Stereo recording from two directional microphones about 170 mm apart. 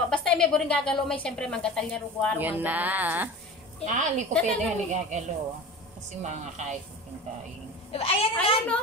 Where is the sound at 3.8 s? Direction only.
45° right (ahead or behind).